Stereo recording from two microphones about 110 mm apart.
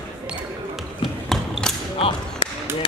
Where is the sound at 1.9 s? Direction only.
60° left (ahead or behind).